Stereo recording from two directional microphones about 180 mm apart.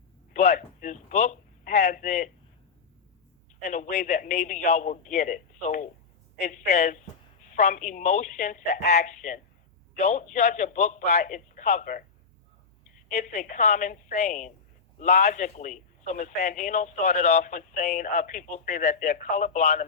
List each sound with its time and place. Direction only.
0.3 s a man's voice: 45° left (ahead or behind)
3.6 s a man's voice: 45° left (ahead or behind)
13.1 s a man's voice: 45° left (ahead or behind)